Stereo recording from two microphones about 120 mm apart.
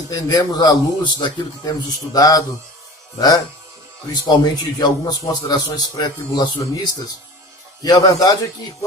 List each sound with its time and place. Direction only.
0.1 s a man's voice: 30° left (ahead or behind)
2.1 s a man's voice: 30° left (ahead or behind)